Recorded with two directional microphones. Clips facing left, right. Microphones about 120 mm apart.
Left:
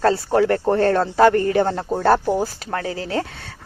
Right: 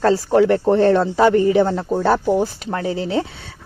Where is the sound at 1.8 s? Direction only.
5° left (ahead or behind).